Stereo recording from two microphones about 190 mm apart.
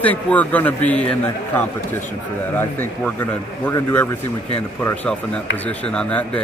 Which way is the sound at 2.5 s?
10° left (ahead or behind).